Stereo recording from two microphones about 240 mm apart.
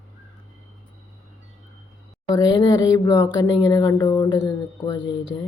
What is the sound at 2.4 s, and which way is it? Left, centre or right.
Speech, centre.